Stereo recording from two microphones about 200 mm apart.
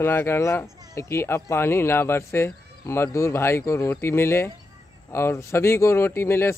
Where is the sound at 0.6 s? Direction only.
20° right (ahead or behind).